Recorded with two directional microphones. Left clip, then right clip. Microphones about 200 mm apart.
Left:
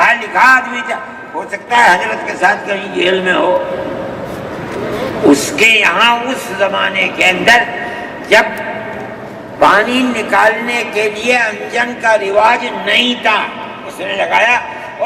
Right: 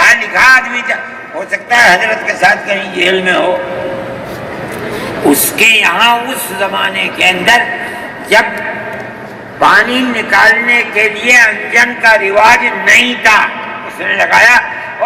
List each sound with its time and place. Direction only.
0.0 s a sound: 40° right (ahead or behind)
1.7 s a man's voice: 55° right (ahead or behind)
5.3 s a man's voice: 55° right (ahead or behind)
9.6 s a man's voice: 40° right (ahead or behind)
11.3 s a man's voice: 25° right (ahead or behind)